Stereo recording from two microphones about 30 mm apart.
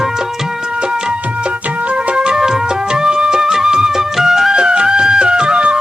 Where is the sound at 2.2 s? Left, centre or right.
Right.